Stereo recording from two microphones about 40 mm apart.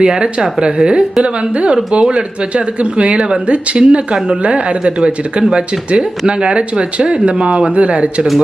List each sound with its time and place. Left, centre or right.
0.0 s speech: right